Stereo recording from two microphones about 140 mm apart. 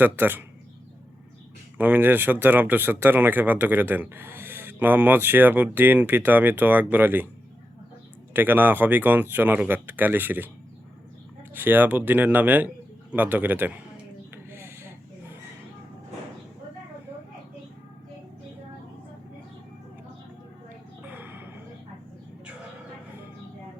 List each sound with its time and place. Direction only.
0.0 s speech: 15° right (ahead or behind)
1.8 s speech: 10° right (ahead or behind)
8.3 s speech: 15° right (ahead or behind)
11.5 s a man's voice: 15° right (ahead or behind)
14.5 s a sound: 15° right (ahead or behind)
21.1 s a sound: 10° right (ahead or behind)